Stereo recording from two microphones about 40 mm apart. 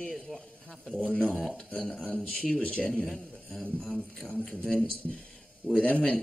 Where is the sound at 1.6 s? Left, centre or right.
Left.